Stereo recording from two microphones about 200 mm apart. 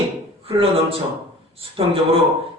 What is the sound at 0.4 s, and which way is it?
A man's voice, 30° right (ahead or behind).